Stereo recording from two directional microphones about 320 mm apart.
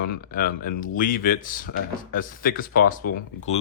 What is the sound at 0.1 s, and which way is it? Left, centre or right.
Speech, left.